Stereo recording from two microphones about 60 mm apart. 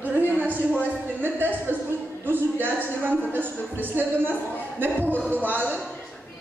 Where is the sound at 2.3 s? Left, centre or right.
Right.